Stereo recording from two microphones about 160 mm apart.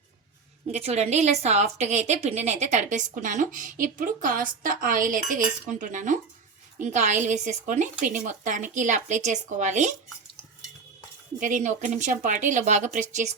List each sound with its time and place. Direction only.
0.7 s a woman's voice: 40° right (ahead or behind)
11.3 s a woman's voice: 55° right (ahead or behind)